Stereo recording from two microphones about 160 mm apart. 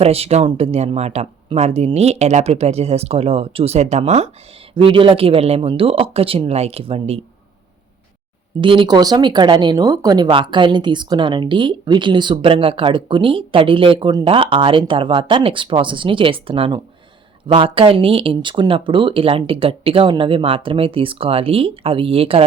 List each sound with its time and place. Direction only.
0.0 s speech: 40° right (ahead or behind)
8.6 s speech: 30° right (ahead or behind)